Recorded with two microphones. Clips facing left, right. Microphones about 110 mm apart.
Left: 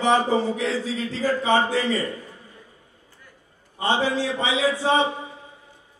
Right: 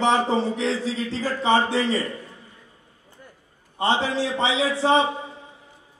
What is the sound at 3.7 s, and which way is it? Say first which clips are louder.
A man's voice: even; 25° right (ahead or behind).